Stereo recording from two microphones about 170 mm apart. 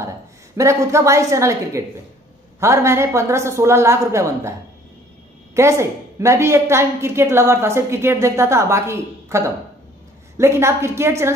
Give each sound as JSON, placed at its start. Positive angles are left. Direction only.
{"t": 0.6, "sound": "a woman's voice", "side_deg": -15}